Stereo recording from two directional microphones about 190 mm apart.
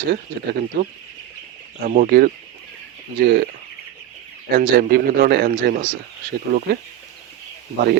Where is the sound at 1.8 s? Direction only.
50° right (ahead or behind).